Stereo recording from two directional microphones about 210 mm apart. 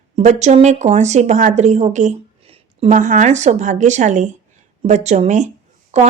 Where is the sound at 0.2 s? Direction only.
35° right (ahead or behind).